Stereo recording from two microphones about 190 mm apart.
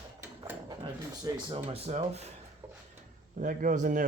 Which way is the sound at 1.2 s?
20° right (ahead or behind).